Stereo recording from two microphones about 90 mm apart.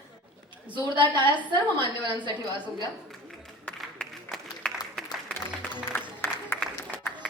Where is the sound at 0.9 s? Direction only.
60° right (ahead or behind).